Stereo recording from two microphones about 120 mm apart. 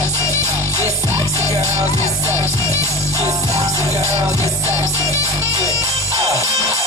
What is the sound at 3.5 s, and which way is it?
Music, 25° right (ahead or behind).